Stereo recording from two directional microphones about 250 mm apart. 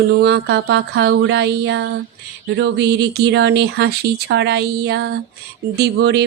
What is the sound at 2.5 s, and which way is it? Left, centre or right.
Speech, right.